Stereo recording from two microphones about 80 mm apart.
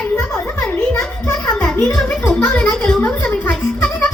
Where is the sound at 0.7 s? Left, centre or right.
Left.